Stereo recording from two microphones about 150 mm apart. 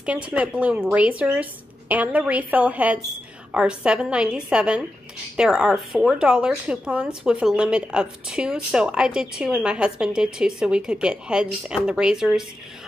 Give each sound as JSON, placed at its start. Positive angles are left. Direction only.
{"t": 0.0, "sound": "speech", "side_deg": -5}